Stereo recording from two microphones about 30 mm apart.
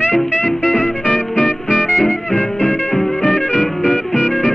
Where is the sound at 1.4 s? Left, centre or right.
Centre.